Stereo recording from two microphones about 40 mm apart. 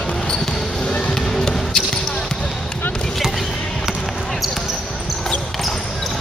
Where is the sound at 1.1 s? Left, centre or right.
Centre.